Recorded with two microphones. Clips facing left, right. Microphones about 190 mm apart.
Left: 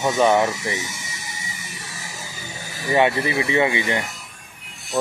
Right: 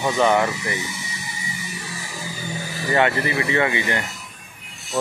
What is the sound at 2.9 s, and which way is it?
Speech, 15° left (ahead or behind).